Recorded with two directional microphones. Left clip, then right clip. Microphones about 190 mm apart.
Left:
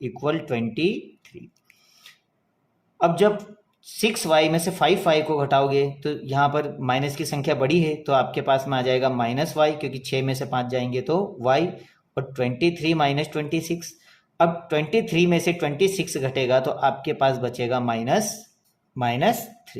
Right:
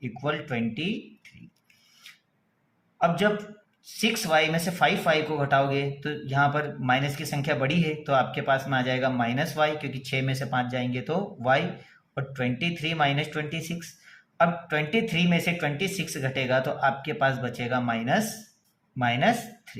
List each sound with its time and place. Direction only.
0.0 s speech: 35° left (ahead or behind)
3.0 s speech: 35° left (ahead or behind)